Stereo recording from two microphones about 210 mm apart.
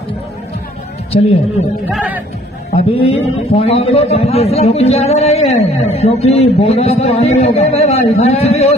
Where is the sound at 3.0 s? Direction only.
30° left (ahead or behind).